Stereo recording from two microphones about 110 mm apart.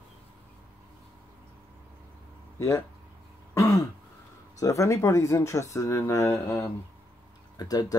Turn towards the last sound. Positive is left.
turn(degrees=35)  # may be behind; listen again after turning